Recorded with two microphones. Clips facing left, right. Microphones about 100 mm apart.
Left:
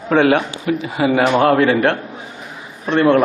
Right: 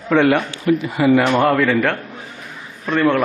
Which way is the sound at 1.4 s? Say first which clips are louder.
Left 2 dB; 65° left (ahead or behind).